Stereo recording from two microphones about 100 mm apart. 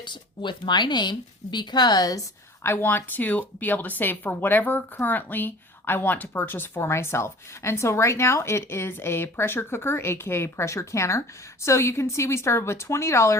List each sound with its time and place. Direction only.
0.0 s a woman's voice: 50° left (ahead or behind)
2.6 s speech: 20° left (ahead or behind)